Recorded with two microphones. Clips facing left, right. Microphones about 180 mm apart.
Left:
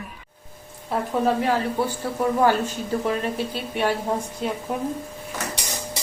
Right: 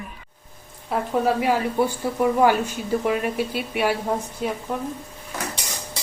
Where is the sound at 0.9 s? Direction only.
10° right (ahead or behind).